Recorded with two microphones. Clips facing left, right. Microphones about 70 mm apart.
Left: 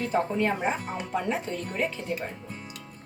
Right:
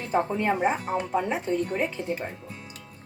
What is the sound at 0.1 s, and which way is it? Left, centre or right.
A woman's voice, right.